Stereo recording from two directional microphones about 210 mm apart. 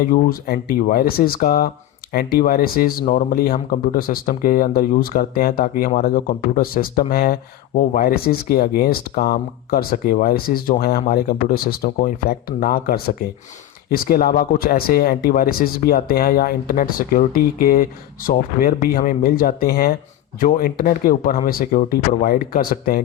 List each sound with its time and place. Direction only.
0.0 s speech: 40° left (ahead or behind)